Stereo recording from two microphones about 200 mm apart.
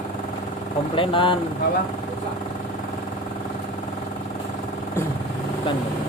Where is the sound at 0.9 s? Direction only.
25° left (ahead or behind).